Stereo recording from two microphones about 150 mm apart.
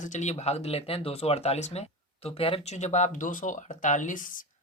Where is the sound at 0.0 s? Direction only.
50° left (ahead or behind).